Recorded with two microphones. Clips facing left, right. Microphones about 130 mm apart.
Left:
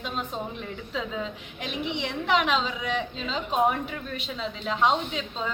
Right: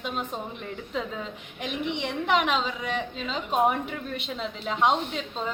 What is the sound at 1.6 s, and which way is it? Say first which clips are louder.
Speech: right 1 dB; 55° right (ahead or behind).